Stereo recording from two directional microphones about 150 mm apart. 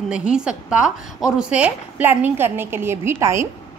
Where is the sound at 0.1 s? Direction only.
5° right (ahead or behind).